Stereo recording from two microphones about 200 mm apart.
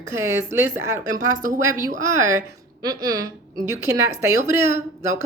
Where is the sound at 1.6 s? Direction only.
15° right (ahead or behind).